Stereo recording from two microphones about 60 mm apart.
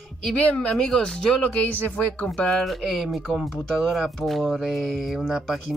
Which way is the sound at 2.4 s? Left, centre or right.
Centre.